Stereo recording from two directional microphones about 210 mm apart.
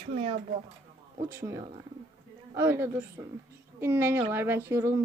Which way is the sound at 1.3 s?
15° right (ahead or behind).